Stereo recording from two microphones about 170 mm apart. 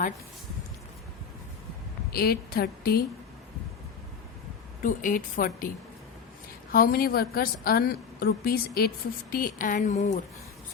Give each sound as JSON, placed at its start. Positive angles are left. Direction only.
{"t": 2.1, "sound": "a woman's voice", "side_deg": 65}
{"t": 4.8, "sound": "a woman's voice", "side_deg": 50}
{"t": 6.7, "sound": "a woman's voice", "side_deg": 60}
{"t": 9.3, "sound": "a woman's voice", "side_deg": 55}